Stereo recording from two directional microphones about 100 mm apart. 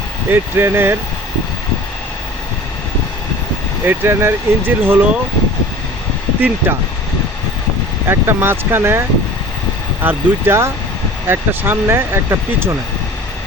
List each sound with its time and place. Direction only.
0.3 s speech: 20° right (ahead or behind)
3.8 s speech: 25° right (ahead or behind)
6.6 s speech: 20° right (ahead or behind)
8.1 s speech: 25° right (ahead or behind)